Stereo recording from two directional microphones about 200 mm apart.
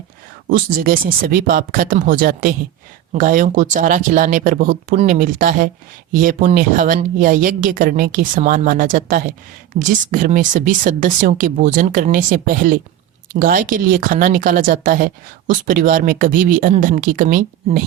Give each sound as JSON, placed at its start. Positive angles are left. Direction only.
{"t": 0.4, "sound": "speech", "side_deg": -45}